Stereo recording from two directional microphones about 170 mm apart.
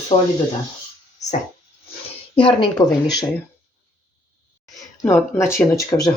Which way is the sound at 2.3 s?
30° left (ahead or behind).